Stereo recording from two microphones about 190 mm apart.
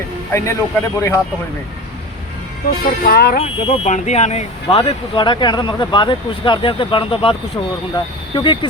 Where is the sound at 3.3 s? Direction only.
30° left (ahead or behind).